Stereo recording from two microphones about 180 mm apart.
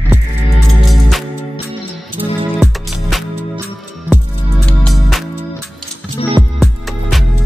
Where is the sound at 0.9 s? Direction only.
Centre (ahead or behind).